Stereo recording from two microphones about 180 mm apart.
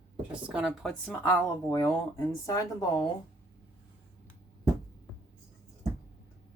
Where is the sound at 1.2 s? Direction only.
15° left (ahead or behind).